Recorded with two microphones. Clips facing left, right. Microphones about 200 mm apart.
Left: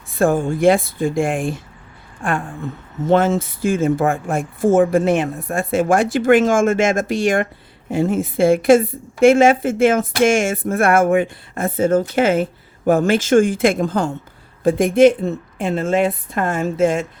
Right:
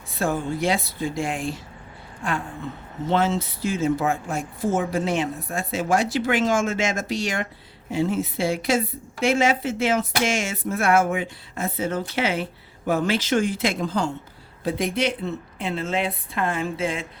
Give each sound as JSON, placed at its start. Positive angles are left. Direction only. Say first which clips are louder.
{"t": 0.2, "sound": "a woman's voice", "louder": "left 8 dB", "side_deg": 50}